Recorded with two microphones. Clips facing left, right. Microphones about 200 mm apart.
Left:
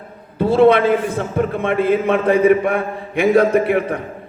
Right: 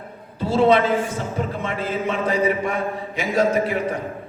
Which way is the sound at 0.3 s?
55° left (ahead or behind).